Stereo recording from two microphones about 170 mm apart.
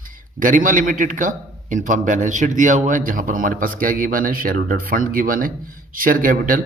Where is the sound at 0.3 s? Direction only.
50° right (ahead or behind).